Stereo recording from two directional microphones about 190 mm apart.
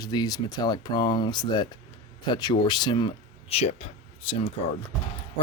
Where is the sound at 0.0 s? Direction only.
20° left (ahead or behind).